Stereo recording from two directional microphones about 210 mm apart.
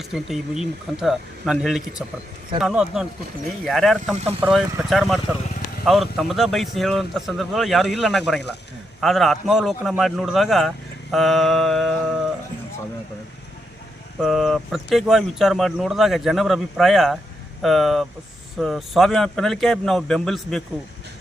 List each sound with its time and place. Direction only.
0.1 s a man's voice: centre (ahead or behind)
14.2 s a man's voice: centre (ahead or behind)